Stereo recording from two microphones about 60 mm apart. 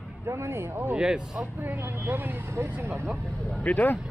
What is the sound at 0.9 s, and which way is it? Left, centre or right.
Speech, centre.